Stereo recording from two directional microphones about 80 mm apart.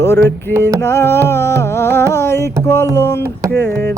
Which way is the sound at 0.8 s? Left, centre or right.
Left.